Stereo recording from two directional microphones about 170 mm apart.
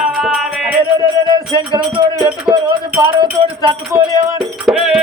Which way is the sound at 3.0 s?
30° right (ahead or behind).